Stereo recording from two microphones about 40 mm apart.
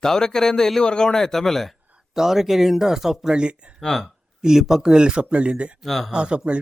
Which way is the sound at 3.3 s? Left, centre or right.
Right.